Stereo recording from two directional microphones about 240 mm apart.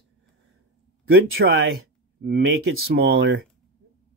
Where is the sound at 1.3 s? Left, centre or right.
Right.